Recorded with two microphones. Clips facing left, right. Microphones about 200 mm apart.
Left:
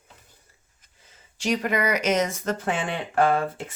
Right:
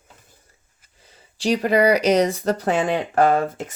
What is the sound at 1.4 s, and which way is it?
Speech, 35° right (ahead or behind).